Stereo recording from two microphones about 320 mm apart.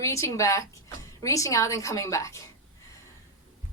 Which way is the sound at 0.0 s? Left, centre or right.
Centre.